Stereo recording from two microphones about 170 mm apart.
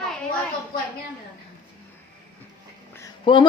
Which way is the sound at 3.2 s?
30° left (ahead or behind).